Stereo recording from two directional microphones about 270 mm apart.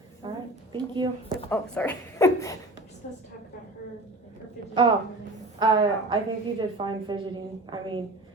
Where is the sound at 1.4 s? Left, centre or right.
Centre.